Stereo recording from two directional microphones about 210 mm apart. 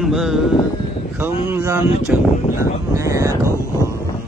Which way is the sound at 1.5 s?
10° right (ahead or behind).